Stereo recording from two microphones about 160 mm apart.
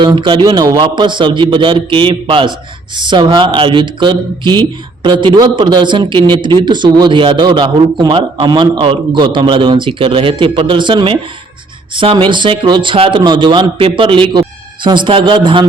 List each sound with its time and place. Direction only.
0.0 s a man's voice: 30° right (ahead or behind)